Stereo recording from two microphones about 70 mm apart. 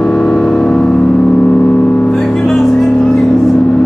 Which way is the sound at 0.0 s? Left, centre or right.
Centre.